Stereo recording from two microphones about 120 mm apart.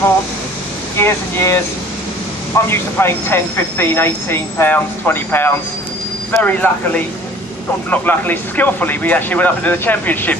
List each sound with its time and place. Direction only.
0.9 s a woman's voice: 20° left (ahead or behind)
2.6 s a woman's voice: 20° left (ahead or behind)